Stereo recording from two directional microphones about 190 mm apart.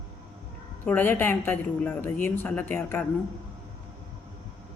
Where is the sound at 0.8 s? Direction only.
10° left (ahead or behind).